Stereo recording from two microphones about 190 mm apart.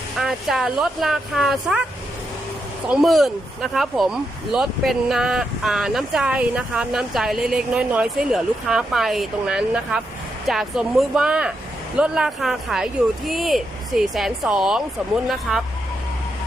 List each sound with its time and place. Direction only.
0.2 s speech: centre (ahead or behind)
2.9 s speech: centre (ahead or behind)